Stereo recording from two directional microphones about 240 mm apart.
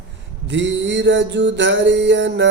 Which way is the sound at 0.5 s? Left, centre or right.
Right.